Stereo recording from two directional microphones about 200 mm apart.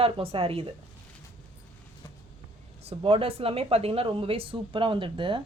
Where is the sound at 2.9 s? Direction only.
30° right (ahead or behind).